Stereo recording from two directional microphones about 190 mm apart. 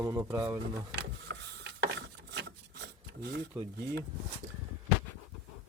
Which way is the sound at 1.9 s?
65° right (ahead or behind).